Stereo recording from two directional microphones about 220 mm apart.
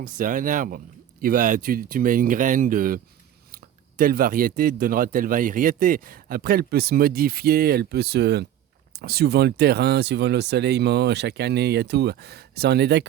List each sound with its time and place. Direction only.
0.0 s speech: 40° right (ahead or behind)